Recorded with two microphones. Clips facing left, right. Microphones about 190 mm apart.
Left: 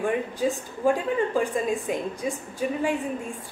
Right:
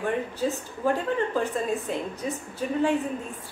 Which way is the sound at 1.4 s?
10° left (ahead or behind).